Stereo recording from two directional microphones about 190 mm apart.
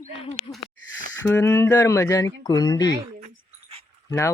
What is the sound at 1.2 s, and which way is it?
Speech, 15° left (ahead or behind).